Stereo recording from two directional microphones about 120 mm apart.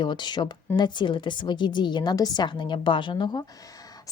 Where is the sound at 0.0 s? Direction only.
40° left (ahead or behind).